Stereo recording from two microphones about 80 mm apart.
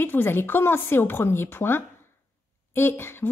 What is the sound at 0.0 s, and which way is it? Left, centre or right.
A woman's voice, left.